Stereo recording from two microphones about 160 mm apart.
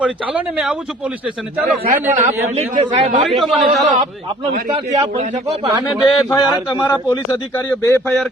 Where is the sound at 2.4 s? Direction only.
45° right (ahead or behind).